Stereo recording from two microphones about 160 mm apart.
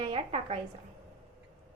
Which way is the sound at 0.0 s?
35° right (ahead or behind).